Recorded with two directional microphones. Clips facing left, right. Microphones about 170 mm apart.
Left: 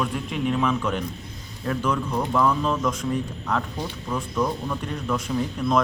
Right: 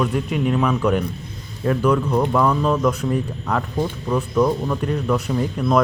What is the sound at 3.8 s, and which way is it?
Speech, 50° right (ahead or behind).